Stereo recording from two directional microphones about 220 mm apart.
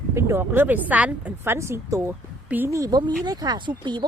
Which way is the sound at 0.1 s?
10° right (ahead or behind).